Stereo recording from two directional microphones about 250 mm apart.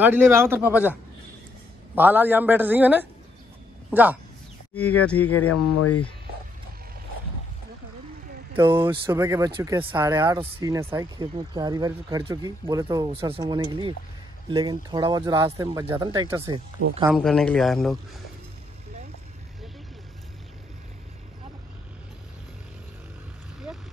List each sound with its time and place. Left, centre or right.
0.0 s speech: centre
2.0 s speech: centre
5.2 s speech: left
8.5 s speech: right
9.1 s speech: centre
17.0 s a man's voice: centre